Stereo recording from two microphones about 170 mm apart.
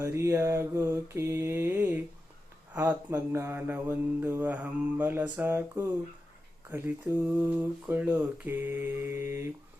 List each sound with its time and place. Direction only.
0.0 s mantra: 15° right (ahead or behind)